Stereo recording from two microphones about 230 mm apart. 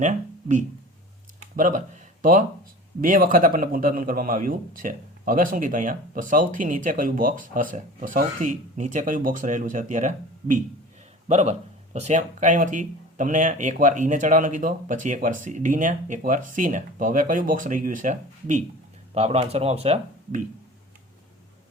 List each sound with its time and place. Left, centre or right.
0.0 s a man's voice: right